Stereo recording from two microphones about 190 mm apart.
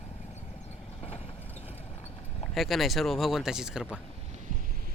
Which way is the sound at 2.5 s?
Centre (ahead or behind).